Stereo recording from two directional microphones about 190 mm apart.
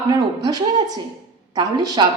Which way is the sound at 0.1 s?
20° right (ahead or behind).